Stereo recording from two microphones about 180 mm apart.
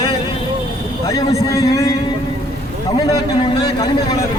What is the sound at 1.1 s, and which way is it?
Speech, 20° left (ahead or behind).